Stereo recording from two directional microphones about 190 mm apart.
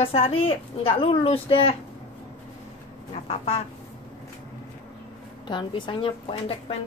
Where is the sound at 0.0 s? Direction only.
30° left (ahead or behind).